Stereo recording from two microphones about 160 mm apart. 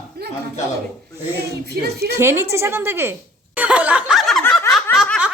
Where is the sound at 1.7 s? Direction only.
85° right.